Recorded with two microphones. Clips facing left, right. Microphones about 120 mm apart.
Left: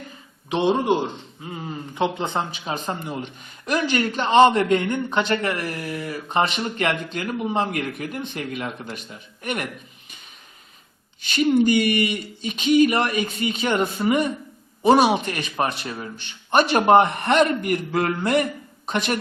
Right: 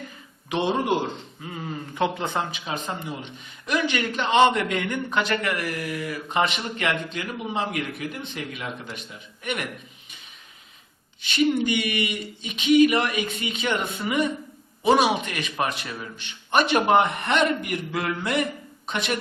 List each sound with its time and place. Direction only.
0.5 s a man's voice: 25° left (ahead or behind)
2.1 s a man's voice: 25° left (ahead or behind); by 9.6 s 40° left (ahead or behind)
11.3 s a man's voice: 40° left (ahead or behind)